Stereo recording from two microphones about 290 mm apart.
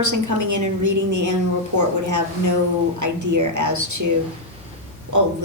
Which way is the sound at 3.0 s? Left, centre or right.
Right.